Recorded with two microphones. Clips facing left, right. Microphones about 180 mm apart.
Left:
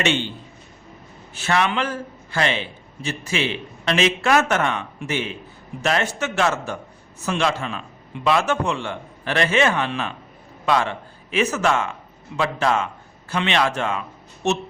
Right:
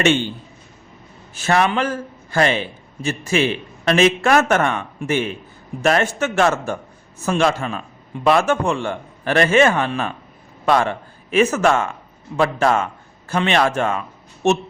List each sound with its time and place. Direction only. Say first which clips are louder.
0.0 s a man's voice: right 5 dB; 50° right (ahead or behind)
1.4 s a man's voice: right 3 dB; 45° right (ahead or behind)